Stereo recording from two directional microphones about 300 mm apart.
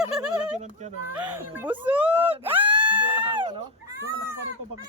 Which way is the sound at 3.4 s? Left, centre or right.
Centre.